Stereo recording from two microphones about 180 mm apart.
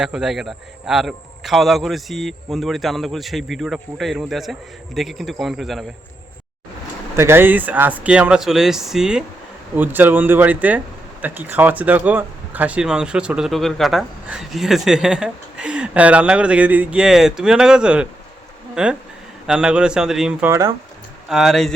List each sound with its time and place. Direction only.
0.0 s speech: 5° right (ahead or behind)
7.2 s speech: 15° right (ahead or behind)
20.5 s speech: 20° right (ahead or behind)
21.2 s speech: centre (ahead or behind)